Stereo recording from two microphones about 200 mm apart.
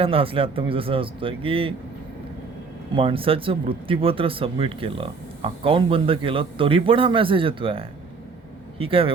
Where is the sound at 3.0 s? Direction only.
25° right (ahead or behind).